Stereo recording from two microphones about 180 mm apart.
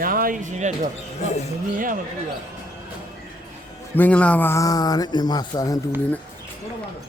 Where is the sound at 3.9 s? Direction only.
10° left (ahead or behind).